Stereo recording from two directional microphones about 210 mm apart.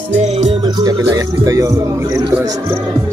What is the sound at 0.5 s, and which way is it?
Music, 20° right (ahead or behind).